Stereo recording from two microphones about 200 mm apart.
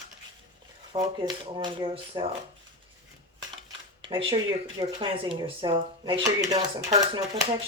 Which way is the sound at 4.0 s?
25° right (ahead or behind).